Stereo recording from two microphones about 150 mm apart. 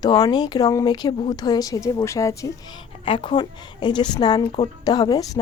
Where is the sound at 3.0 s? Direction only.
35° left (ahead or behind).